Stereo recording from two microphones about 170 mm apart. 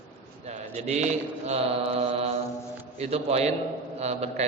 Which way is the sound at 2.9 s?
35° right (ahead or behind).